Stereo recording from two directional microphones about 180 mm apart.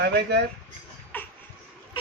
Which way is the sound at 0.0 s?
70° right (ahead or behind).